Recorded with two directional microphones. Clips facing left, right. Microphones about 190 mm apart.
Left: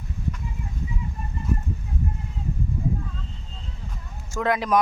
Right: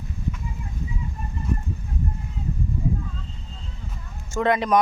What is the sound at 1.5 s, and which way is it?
Chicken, centre (ahead or behind).